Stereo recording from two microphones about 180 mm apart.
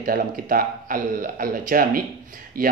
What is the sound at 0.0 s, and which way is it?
A man's voice, 50° right (ahead or behind).